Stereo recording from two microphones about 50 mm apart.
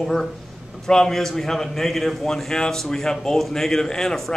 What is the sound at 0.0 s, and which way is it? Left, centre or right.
A man's voice, centre.